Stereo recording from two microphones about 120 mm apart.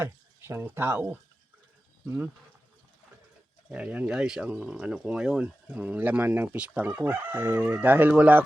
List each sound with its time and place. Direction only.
0.0 s speech: 20° right (ahead or behind)
3.7 s speech: 10° right (ahead or behind)